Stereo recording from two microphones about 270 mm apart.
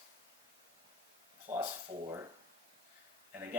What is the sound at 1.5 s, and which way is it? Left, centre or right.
Speech, centre.